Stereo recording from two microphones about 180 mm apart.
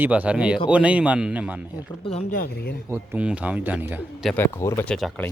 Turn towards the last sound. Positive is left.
turn(degrees=5)  # may be behind; listen again after turning